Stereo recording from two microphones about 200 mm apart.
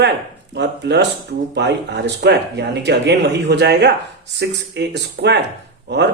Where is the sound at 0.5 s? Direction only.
60° right (ahead or behind).